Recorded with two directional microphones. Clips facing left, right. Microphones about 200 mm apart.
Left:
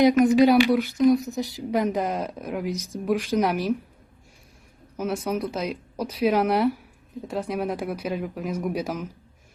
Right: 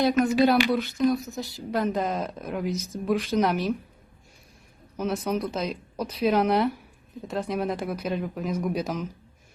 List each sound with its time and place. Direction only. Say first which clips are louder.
0.0 s speech: left 4 dB; 15° left (ahead or behind)
4.9 s speech: left 1 dB; 10° left (ahead or behind)